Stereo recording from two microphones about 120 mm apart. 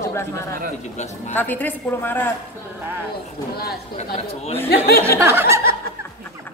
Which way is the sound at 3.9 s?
60° left (ahead or behind).